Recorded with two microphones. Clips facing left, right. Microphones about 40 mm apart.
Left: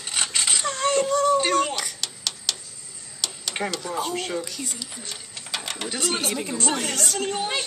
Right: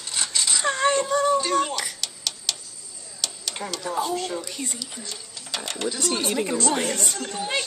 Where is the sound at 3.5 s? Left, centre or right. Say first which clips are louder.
Left 6 dB; left.